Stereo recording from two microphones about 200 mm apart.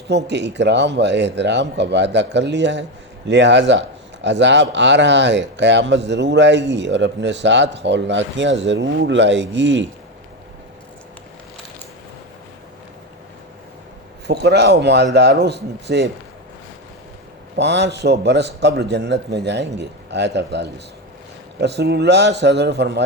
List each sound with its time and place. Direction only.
0.3 s a man's voice: 60° right (ahead or behind)
14.3 s a man's voice: 55° right (ahead or behind)
17.6 s a man's voice: 60° right (ahead or behind)